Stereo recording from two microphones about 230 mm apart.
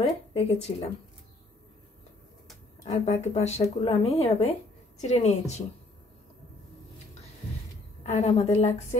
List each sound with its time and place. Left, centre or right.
0.3 s speech: left
2.8 s speech: left
8.0 s speech: left